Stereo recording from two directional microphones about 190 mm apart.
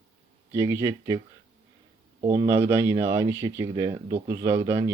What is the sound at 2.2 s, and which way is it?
Speech, 20° right (ahead or behind).